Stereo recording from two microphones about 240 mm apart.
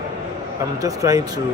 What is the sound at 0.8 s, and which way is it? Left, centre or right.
Speech, centre.